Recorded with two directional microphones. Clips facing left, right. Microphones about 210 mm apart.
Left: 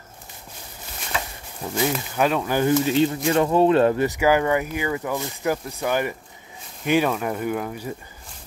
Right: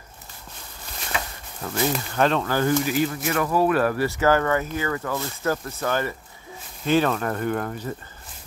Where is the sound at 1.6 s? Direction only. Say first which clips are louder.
Left 1 dB; 10° left (ahead or behind).